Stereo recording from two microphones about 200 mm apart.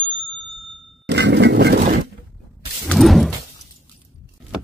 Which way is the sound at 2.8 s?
Centre (ahead or behind).